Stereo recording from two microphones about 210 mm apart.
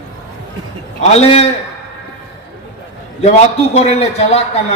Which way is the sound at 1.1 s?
30° left (ahead or behind).